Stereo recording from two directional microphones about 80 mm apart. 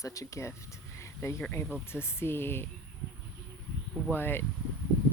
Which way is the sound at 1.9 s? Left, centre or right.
Left.